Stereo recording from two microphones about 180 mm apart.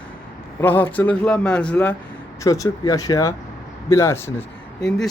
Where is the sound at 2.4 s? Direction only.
20° left (ahead or behind).